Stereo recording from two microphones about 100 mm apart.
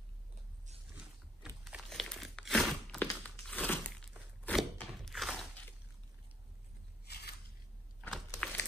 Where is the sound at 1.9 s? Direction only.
Centre (ahead or behind).